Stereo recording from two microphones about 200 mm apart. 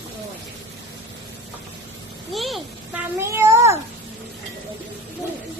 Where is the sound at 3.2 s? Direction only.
15° right (ahead or behind).